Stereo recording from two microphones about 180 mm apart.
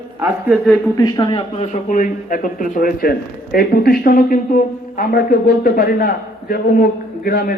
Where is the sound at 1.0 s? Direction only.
20° left (ahead or behind).